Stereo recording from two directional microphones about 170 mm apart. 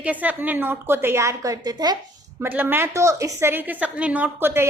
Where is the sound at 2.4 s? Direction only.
10° right (ahead or behind).